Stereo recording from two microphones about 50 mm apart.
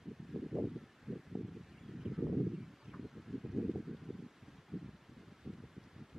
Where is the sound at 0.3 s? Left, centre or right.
Centre.